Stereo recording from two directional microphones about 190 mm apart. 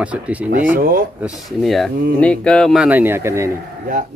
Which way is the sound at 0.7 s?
50° right (ahead or behind).